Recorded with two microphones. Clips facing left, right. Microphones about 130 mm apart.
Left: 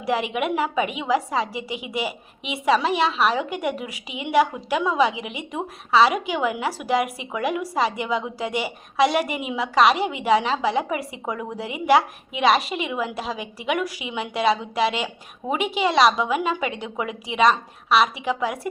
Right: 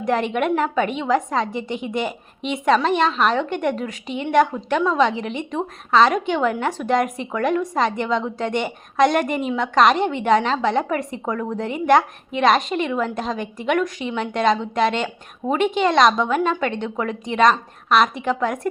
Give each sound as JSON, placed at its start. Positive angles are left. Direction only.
{"t": 0.0, "sound": "a woman's voice", "side_deg": 5}